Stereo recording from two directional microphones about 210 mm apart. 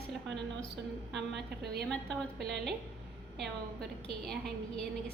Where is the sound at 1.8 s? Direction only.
5° left (ahead or behind).